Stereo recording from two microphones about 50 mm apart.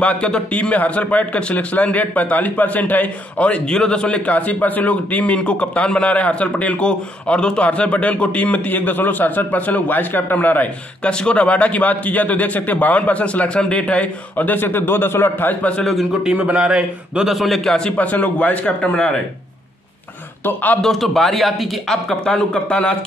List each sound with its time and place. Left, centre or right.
0.0 s a man's voice: left
4.3 s a man's voice: left
6.8 s a man's voice: centre; by 10.7 s left
11.1 s a man's voice: left
14.3 s a man's voice: left
15.8 s speech: centre
16.5 s a man's voice: centre
17.3 s speech: centre
17.6 s speech: centre
17.9 s a man's voice: left
20.4 s a man's voice: left
20.8 s speech: centre
22.2 s speech: centre